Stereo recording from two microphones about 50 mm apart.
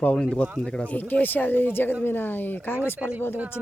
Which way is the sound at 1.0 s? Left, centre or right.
Left.